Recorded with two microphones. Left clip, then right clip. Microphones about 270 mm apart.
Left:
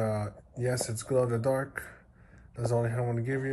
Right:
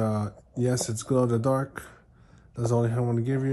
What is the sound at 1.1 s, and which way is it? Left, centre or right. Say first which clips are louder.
Speech: right 2 dB; right.